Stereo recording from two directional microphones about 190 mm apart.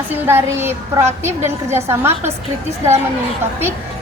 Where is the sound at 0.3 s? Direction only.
10° right (ahead or behind).